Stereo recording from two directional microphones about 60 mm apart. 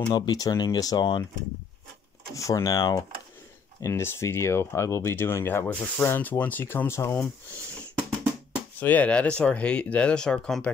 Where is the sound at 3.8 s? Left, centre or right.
Left.